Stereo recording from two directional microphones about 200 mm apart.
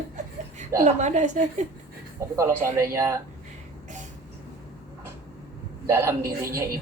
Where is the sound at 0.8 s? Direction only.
35° right (ahead or behind).